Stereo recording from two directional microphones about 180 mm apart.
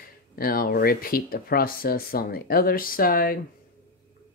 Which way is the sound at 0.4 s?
55° left (ahead or behind).